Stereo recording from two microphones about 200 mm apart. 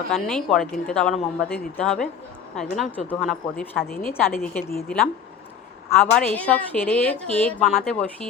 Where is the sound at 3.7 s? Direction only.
50° left (ahead or behind).